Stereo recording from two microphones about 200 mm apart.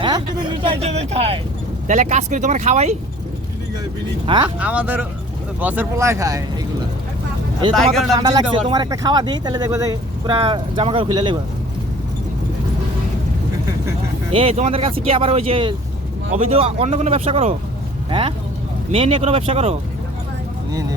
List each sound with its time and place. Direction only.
0.6 s speech: 30° right (ahead or behind)
4.3 s speech: 25° right (ahead or behind)
4.6 s speech: 5° right (ahead or behind)
8.1 s speech: 20° right (ahead or behind)
14.3 s speech: 30° right (ahead or behind)